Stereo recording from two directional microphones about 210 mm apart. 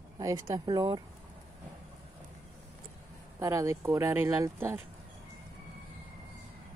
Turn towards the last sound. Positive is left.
turn(degrees=-15)  # may be behind; listen again after turning